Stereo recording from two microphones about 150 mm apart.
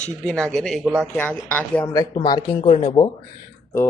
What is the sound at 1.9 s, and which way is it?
Speech, 25° left (ahead or behind).